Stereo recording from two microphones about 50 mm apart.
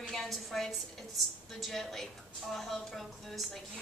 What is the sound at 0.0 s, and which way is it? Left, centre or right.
A woman's voice, centre.